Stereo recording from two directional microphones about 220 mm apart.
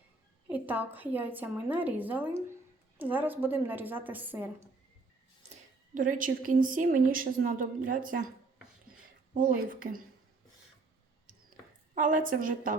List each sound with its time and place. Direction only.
0.4 s a woman's voice: 5° right (ahead or behind)
5.5 s a woman's voice: 35° right (ahead or behind)
9.3 s a woman's voice: 40° right (ahead or behind)
11.9 s a woman's voice: 35° right (ahead or behind)